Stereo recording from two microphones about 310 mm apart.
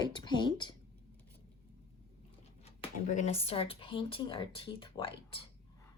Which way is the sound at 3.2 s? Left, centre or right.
Centre.